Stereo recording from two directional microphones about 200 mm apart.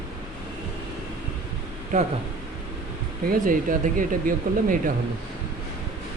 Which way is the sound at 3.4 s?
40° right (ahead or behind).